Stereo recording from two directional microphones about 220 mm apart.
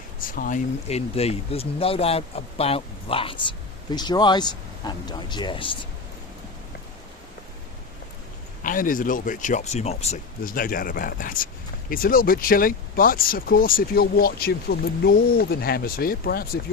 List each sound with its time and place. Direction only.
0.2 s speech: 40° left (ahead or behind); by 5.7 s 20° left (ahead or behind)
8.6 s speech: 40° left (ahead or behind)